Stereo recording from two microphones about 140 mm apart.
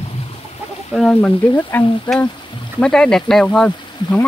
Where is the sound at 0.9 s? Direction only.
5° left (ahead or behind).